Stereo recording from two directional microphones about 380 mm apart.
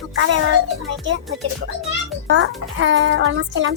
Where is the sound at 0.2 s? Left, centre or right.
Right.